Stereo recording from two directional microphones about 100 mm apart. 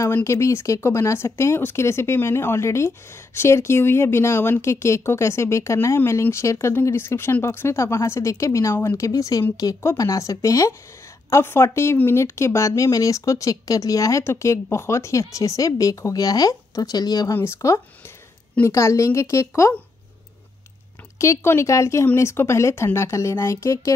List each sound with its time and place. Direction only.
0.1 s speech: 30° left (ahead or behind)
8.7 s speech: 20° left (ahead or behind)
9.0 s speech: 35° left (ahead or behind)
17.3 s speech: 25° left (ahead or behind)
21.2 s speech: 25° left (ahead or behind)